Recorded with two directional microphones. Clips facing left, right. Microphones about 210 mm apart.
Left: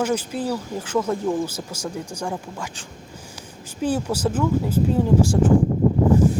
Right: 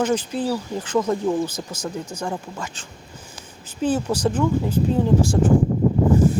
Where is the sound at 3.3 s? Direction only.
10° left (ahead or behind).